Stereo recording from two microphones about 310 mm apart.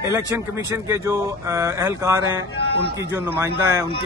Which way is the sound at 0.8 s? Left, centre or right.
Centre.